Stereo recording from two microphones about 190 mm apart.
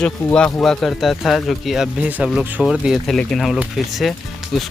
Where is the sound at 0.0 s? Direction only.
5° left (ahead or behind).